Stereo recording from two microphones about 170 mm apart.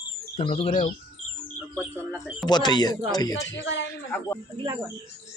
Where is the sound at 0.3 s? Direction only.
35° left (ahead or behind).